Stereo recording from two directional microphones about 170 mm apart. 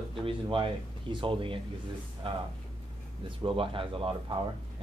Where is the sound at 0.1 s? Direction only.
30° right (ahead or behind).